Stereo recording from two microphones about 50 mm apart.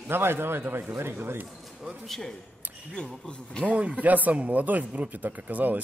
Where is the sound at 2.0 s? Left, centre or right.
Centre.